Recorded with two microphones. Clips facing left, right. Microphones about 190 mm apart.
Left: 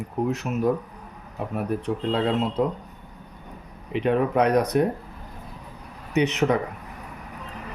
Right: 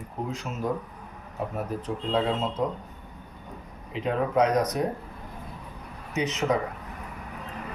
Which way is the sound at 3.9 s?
65° left (ahead or behind).